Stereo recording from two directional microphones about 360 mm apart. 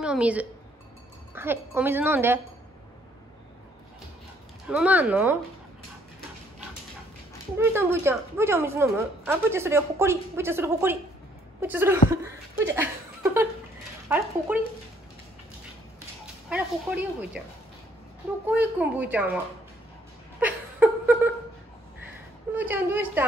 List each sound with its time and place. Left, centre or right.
0.0 s a woman's voice: centre
4.6 s a woman's voice: centre
7.5 s a woman's voice: centre
12.6 s laughter: centre
14.0 s a woman's voice: centre
16.4 s a woman's voice: centre
18.5 s a woman's voice: centre
20.3 s a sound: centre
22.5 s a woman's voice: centre